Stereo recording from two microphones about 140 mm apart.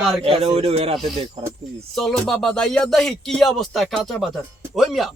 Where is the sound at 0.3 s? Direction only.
45° right (ahead or behind).